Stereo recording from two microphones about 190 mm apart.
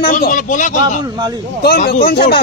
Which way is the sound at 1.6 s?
50° left (ahead or behind).